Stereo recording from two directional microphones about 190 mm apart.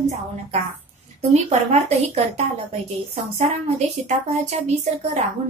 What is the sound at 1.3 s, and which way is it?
A woman's voice, 35° right (ahead or behind).